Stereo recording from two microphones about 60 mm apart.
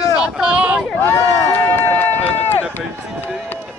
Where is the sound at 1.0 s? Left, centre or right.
Left.